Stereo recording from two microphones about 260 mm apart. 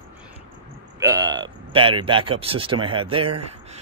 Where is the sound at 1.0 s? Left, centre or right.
Centre.